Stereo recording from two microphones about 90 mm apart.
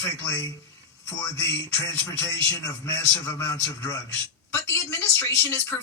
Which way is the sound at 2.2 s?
30° left (ahead or behind).